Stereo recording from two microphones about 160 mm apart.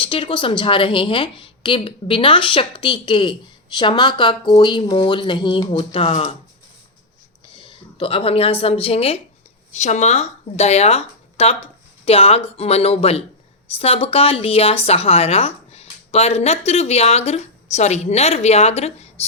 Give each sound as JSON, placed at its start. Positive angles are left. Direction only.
{"t": 0.0, "sound": "a woman's voice", "side_deg": 35}
{"t": 7.6, "sound": "a woman's voice", "side_deg": 35}